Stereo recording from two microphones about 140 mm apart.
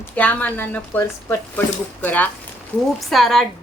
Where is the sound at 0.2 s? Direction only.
10° left (ahead or behind).